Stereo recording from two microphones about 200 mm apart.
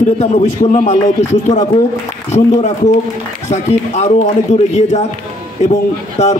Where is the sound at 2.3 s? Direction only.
30° left (ahead or behind).